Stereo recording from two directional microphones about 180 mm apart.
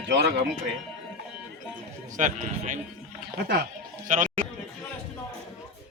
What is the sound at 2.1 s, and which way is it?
Speech, 45° right (ahead or behind).